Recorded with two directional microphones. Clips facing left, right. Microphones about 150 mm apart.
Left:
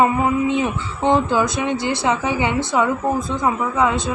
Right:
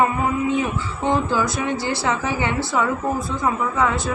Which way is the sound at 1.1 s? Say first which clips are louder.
Left 4 dB; 20° left (ahead or behind).